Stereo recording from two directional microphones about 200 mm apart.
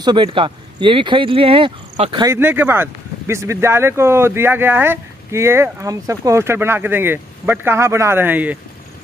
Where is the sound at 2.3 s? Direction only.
10° right (ahead or behind).